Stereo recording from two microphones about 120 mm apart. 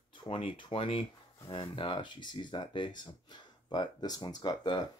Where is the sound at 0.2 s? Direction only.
50° left (ahead or behind).